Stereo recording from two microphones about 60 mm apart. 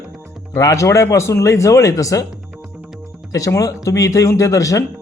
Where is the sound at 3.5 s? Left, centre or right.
Left.